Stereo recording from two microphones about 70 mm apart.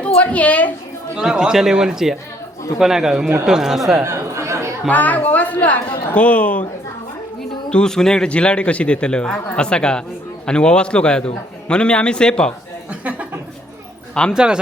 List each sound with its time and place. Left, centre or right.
0.2 s a woman's voice: left
1.1 s speech: centre
4.0 s chatter: right
4.9 s a woman's voice: left
7.7 s a man's voice: centre
12.9 s speech: right
14.3 s speech: centre